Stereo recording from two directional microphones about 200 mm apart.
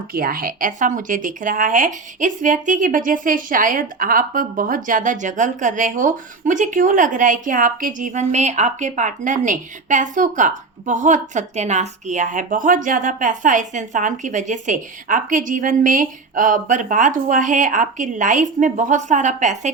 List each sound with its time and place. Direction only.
0.1 s speech: 45° right (ahead or behind)